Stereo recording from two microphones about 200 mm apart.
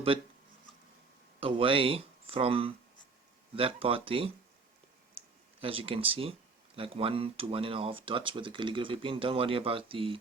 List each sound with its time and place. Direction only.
1.4 s speech: 25° right (ahead or behind)
5.2 s a sound: 30° right (ahead or behind)
5.5 s speech: 30° right (ahead or behind)